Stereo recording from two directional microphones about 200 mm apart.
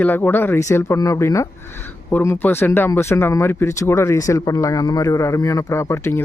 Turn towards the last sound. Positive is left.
turn(degrees=15)  # may be behind; listen again after turning